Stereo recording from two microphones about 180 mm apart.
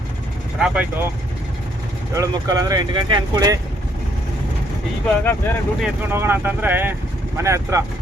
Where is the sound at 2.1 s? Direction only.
20° right (ahead or behind).